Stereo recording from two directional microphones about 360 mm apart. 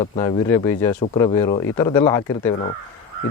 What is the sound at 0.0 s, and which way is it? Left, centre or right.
A man's voice, centre.